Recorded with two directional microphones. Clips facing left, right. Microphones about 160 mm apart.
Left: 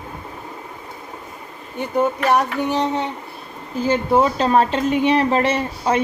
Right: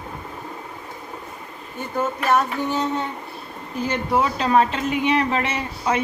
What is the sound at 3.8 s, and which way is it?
Speech, 30° left (ahead or behind).